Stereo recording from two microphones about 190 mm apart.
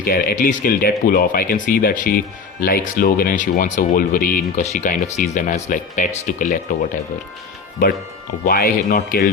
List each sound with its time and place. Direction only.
0.0 s speech: 50° left (ahead or behind)
7.8 s speech: 45° left (ahead or behind)